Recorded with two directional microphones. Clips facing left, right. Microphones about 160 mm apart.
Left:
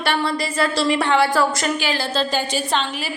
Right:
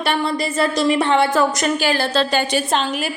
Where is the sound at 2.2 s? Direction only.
70° right (ahead or behind).